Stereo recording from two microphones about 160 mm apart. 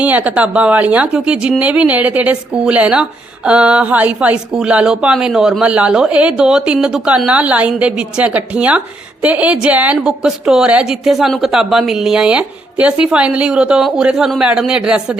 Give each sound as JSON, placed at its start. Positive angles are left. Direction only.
{"t": 0.0, "sound": "a woman's voice", "side_deg": -10}